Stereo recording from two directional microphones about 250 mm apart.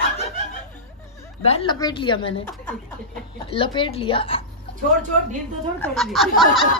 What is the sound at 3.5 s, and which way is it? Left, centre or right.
Speech, left.